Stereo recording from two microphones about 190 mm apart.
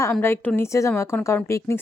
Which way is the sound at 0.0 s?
10° left (ahead or behind).